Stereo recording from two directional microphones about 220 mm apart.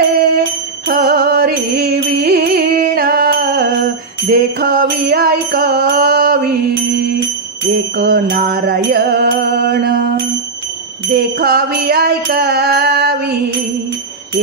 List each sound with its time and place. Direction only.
0.8 s music: 45° right (ahead or behind)
7.7 s music: 45° right (ahead or behind)
11.1 s music: 45° right (ahead or behind)